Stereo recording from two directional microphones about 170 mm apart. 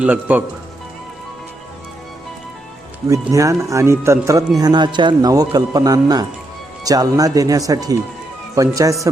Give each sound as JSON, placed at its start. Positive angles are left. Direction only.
{"t": 0.0, "sound": "speech", "side_deg": -10}
{"t": 3.1, "sound": "speech", "side_deg": -20}